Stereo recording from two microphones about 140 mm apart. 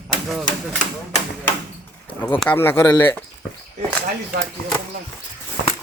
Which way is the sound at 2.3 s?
10° left (ahead or behind).